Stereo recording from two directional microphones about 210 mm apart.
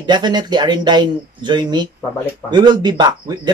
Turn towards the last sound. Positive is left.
turn(degrees=-20)  # may be behind; listen again after turning